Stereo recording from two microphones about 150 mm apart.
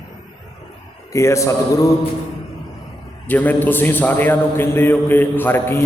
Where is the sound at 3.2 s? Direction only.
10° left (ahead or behind).